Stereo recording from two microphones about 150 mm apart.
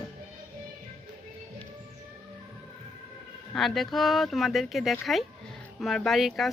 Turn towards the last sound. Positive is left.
turn(degrees=0)  # may be behind; listen again after turning